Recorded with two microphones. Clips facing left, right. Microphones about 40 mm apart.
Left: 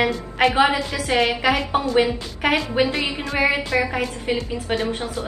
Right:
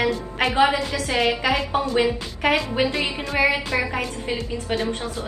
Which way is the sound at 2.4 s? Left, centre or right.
Centre.